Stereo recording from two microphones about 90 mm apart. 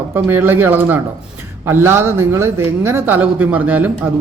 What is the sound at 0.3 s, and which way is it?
Speech, 25° right (ahead or behind).